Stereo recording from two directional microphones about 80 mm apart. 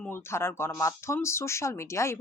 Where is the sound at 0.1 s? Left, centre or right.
Left.